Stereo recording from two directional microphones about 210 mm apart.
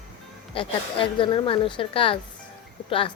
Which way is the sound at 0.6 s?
25° left (ahead or behind).